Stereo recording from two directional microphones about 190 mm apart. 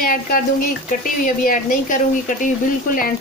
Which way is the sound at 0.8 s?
45° left (ahead or behind).